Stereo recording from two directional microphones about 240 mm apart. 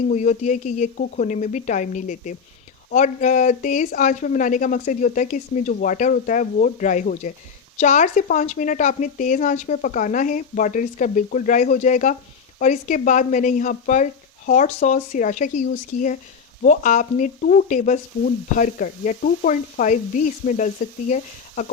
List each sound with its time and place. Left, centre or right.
0.1 s speech: left